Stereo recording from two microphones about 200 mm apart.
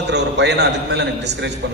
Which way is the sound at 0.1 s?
60° right (ahead or behind).